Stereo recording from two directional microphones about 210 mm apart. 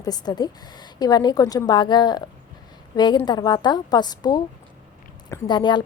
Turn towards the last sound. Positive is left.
turn(degrees=20)  # may be behind; listen again after turning